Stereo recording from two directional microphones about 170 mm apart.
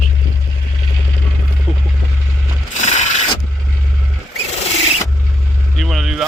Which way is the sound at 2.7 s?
45° left (ahead or behind).